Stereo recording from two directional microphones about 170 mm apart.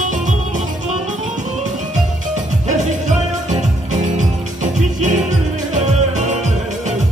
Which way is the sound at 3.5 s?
45° right (ahead or behind).